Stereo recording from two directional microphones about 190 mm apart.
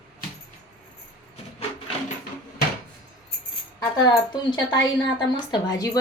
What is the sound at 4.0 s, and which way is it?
Speech, 20° left (ahead or behind).